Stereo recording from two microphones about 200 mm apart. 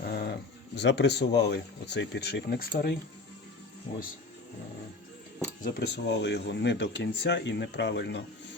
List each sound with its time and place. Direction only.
0.0 s a sound: 50° left (ahead or behind)
0.8 s speech: 60° left (ahead or behind)
5.6 s speech: 60° left (ahead or behind)